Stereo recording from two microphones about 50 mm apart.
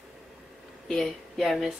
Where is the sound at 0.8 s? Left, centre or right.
Centre.